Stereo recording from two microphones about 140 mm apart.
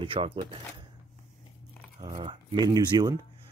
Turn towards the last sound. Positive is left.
turn(degrees=-25)  # may be behind; listen again after turning